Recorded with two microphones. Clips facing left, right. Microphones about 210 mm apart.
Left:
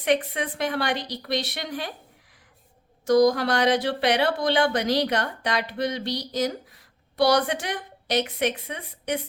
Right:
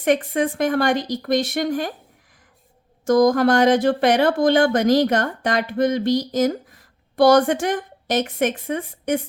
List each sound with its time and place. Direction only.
0.0 s speech: 45° right (ahead or behind)
3.0 s speech: 50° right (ahead or behind)